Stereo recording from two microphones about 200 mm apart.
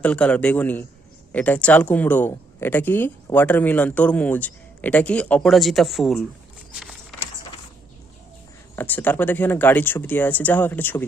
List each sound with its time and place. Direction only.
0.0 s speech: 5° left (ahead or behind)
6.7 s a sound: centre (ahead or behind)
8.7 s speech: 10° left (ahead or behind)